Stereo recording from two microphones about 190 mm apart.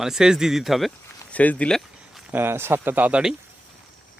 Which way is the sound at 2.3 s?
10° right (ahead or behind).